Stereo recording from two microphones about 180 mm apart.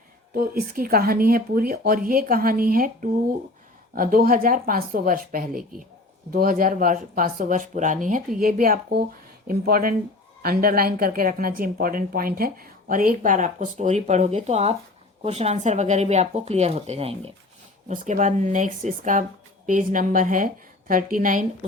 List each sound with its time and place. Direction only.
0.3 s a woman's voice: 55° right (ahead or behind)